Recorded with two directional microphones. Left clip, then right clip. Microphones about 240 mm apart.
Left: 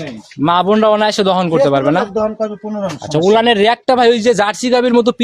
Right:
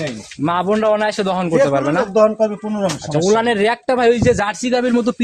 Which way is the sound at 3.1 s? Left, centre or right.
Left.